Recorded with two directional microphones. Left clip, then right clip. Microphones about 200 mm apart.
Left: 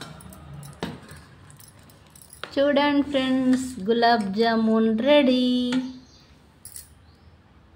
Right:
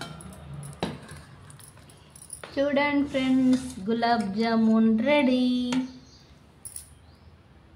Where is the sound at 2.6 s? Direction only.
40° left (ahead or behind).